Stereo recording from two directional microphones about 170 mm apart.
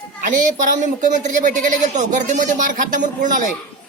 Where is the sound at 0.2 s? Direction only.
50° right (ahead or behind).